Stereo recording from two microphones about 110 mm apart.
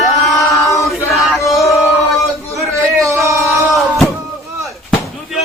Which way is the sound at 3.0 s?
25° right (ahead or behind).